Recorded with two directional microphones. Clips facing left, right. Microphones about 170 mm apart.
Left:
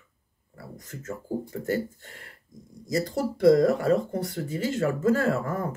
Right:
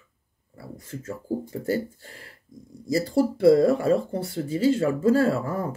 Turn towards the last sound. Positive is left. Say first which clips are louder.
# right 3 dB
turn(degrees=-30)  # may be behind; listen again after turning